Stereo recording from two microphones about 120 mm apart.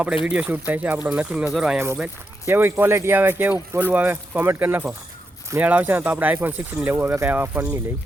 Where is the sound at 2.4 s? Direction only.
20° right (ahead or behind).